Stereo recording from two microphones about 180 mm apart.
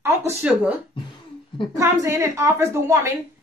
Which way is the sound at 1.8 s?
15° right (ahead or behind).